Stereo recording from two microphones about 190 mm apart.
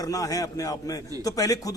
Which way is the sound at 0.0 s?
20° left (ahead or behind).